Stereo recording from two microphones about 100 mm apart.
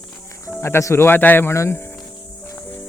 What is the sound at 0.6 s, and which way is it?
Speech, 25° left (ahead or behind).